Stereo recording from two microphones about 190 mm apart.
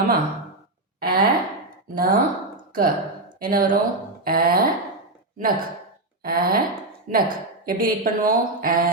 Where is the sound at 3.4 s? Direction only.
50° right (ahead or behind).